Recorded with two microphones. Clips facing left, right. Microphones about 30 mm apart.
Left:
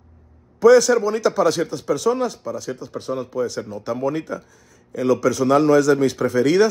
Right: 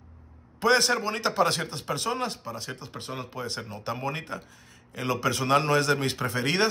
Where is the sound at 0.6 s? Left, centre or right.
Right.